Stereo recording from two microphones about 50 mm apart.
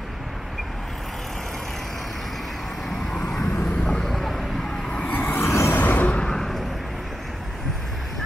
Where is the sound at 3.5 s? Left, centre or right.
Left.